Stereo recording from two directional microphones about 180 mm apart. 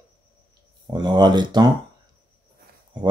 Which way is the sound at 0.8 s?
25° right (ahead or behind).